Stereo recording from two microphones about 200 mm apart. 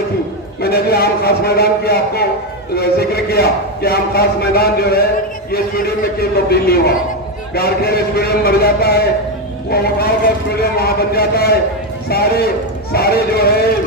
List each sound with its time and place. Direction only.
0.6 s a man's voice: 50° left (ahead or behind)